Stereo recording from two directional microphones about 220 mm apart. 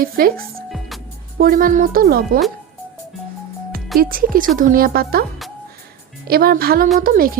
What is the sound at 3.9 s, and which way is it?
A woman's voice, 40° right (ahead or behind).